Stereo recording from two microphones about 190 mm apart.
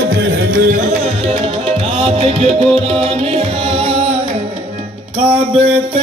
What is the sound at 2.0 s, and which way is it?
Music, 30° right (ahead or behind).